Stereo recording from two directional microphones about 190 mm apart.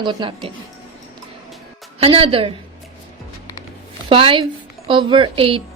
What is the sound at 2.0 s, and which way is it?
Speech, 30° right (ahead or behind).